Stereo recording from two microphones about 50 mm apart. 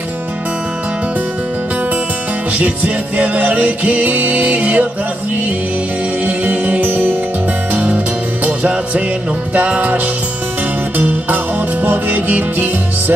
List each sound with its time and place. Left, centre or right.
2.6 s music: right
6.2 s music: right
9.5 s music: right
11.0 s music: right